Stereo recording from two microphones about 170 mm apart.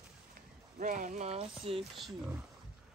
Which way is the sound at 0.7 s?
50° right (ahead or behind).